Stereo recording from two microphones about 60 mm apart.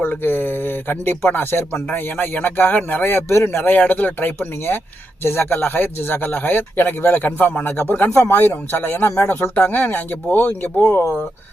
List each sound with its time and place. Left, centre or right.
0.0 s speech: left
3.0 s speech: left